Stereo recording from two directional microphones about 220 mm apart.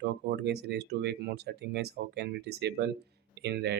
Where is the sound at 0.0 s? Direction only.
50° right (ahead or behind).